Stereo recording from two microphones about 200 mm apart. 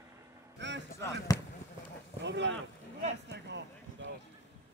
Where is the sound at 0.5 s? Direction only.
60° right (ahead or behind).